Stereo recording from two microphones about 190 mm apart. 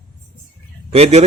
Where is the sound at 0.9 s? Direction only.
35° right (ahead or behind).